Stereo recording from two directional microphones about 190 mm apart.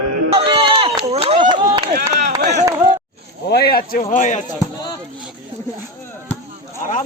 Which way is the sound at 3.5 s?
55° left (ahead or behind).